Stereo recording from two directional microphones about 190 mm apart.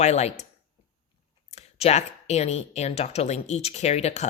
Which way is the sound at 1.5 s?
35° left (ahead or behind).